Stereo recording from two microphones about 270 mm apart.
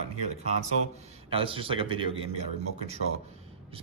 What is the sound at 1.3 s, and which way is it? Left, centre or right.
A man's voice, centre.